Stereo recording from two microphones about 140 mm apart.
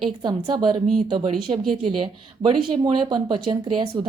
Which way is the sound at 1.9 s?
35° right (ahead or behind).